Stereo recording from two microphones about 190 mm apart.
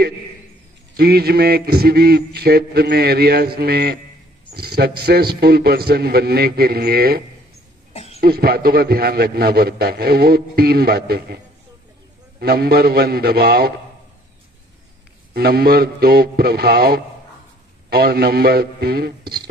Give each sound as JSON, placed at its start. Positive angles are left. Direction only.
{"t": 0.9, "sound": "a man's voice", "side_deg": -55}
{"t": 7.9, "sound": "cough", "side_deg": 35}
{"t": 8.2, "sound": "a man's voice", "side_deg": -55}
{"t": 15.3, "sound": "a man's voice", "side_deg": -55}